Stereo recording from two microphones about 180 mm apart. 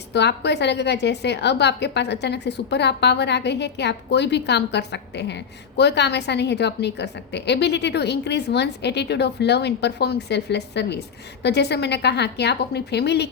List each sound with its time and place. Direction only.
0.1 s a woman's voice: 70° left (ahead or behind)